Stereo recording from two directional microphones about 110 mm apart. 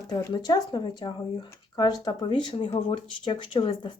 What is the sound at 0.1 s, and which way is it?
Speech, 40° left (ahead or behind).